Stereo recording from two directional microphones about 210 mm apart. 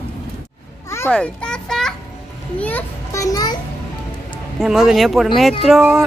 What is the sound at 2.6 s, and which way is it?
A child's voice, 10° left (ahead or behind).